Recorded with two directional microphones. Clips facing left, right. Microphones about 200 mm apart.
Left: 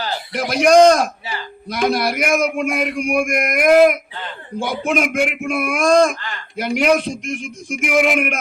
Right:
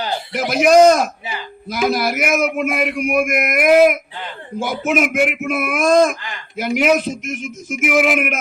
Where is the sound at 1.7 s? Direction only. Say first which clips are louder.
Even; 5° right (ahead or behind).